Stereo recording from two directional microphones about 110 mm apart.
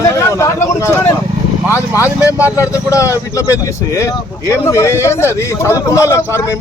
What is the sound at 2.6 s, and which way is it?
Speech, 30° left (ahead or behind).